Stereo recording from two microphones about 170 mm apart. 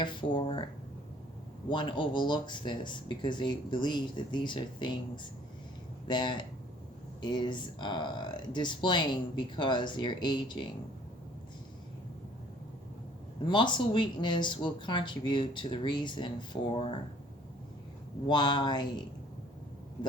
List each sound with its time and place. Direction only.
0.0 s speech: 30° left (ahead or behind)
1.7 s speech: 30° left (ahead or behind)
13.4 s speech: 25° left (ahead or behind)
18.3 s speech: 25° left (ahead or behind)